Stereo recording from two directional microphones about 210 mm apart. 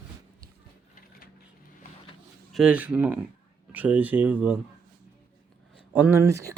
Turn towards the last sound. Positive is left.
turn(degrees=-15)  # may be behind; listen again after turning